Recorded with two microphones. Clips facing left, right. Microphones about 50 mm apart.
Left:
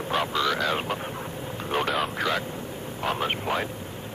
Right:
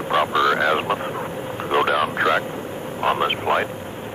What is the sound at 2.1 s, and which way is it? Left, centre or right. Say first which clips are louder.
Speech: right 7 dB; right.